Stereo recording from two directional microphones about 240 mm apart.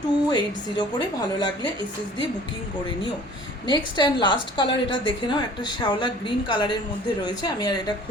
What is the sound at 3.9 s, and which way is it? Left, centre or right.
A woman's voice, centre.